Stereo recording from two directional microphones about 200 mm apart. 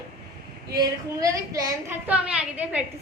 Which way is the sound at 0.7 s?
15° right (ahead or behind).